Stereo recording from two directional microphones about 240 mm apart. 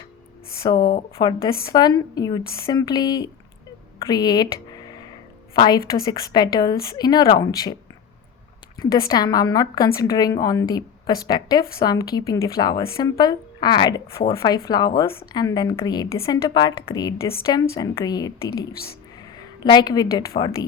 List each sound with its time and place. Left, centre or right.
0.6 s speech: centre
0.9 s speech: left
1.6 s a woman's voice: centre
8.8 s a woman's voice: centre
19.6 s a woman's voice: centre